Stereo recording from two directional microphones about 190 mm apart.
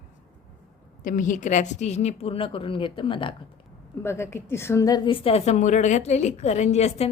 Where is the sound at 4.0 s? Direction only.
15° left (ahead or behind).